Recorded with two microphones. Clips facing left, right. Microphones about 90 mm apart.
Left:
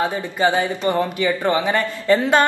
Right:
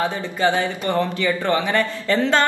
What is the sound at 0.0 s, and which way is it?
Speech, 20° left (ahead or behind).